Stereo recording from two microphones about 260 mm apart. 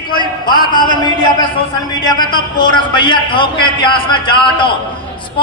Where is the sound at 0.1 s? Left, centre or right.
Centre.